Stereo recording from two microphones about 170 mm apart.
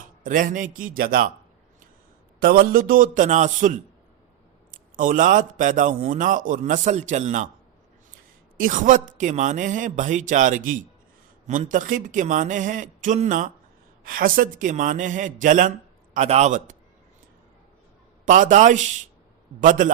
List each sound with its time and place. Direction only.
0.3 s a man's voice: 50° right (ahead or behind)
2.4 s a man's voice: 60° right (ahead or behind)
4.9 s a man's voice: 50° right (ahead or behind)
8.5 s a man's voice: 50° right (ahead or behind)
18.3 s a man's voice: 50° right (ahead or behind)